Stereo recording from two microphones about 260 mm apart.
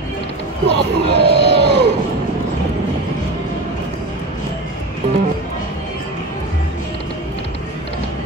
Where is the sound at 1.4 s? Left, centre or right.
Right.